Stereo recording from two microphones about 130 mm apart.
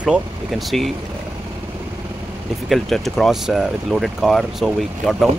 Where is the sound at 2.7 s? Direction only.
5° left (ahead or behind).